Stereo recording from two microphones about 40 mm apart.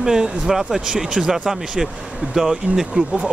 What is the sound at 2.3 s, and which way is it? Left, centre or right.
Speech, centre.